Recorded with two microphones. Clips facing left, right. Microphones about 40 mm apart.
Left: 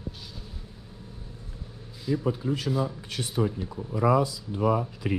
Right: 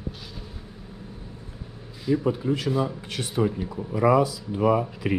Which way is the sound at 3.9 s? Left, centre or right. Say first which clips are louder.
Right 3 dB; right.